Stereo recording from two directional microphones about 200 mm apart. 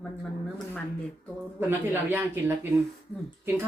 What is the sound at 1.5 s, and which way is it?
Speech, 10° right (ahead or behind).